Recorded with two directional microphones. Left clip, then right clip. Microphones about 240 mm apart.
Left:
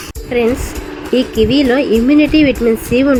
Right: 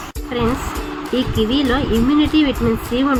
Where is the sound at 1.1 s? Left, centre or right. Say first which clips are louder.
Left 7 dB; centre.